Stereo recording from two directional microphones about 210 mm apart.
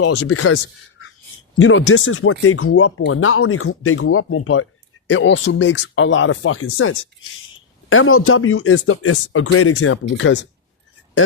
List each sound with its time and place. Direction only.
0.0 s speech: 90° left
3.0 s speech: 75° left (ahead or behind)